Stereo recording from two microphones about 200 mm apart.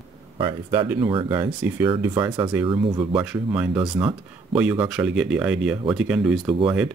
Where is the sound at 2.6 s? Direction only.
25° right (ahead or behind).